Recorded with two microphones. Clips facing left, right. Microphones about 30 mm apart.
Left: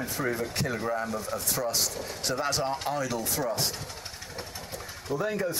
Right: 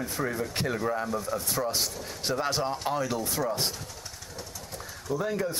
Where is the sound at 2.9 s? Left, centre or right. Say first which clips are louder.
Right 1 dB; centre.